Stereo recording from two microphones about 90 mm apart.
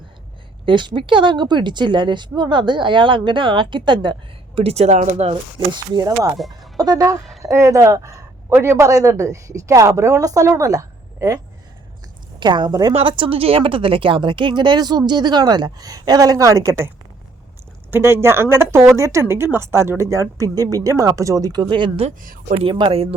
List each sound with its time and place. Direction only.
0.6 s speech: 60° right (ahead or behind)
5.3 s a woman's voice: 55° right (ahead or behind)
6.3 s speech: centre (ahead or behind)
6.7 s a woman's voice: 45° right (ahead or behind)
12.4 s speech: 55° right (ahead or behind)
12.9 s a woman's voice: 85° right; by 16.9 s 30° right (ahead or behind)
17.9 s speech: 30° right (ahead or behind); by 23.0 s 80° right